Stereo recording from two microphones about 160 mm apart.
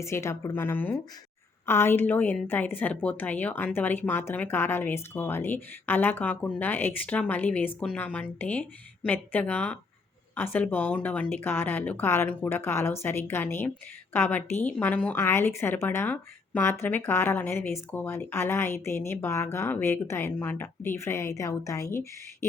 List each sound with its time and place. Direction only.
0.0 s a woman's voice: 20° left (ahead or behind)